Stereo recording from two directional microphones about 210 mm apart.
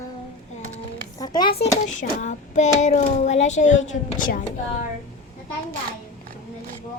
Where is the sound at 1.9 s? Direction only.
35° left (ahead or behind).